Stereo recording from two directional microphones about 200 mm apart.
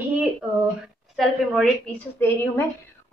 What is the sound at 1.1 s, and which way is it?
Speech, centre (ahead or behind).